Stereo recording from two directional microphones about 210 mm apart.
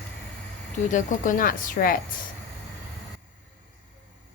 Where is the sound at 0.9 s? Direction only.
40° left (ahead or behind).